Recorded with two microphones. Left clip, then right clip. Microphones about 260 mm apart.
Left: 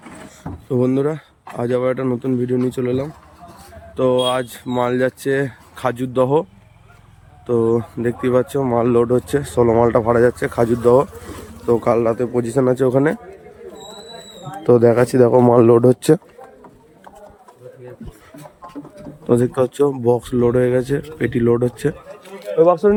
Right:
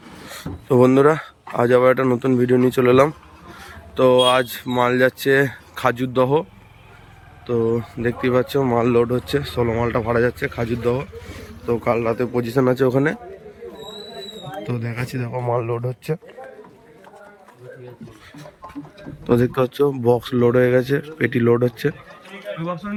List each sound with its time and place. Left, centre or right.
0.3 s speech: centre
14.6 s speech: centre
19.2 s speech: centre
22.4 s speech: left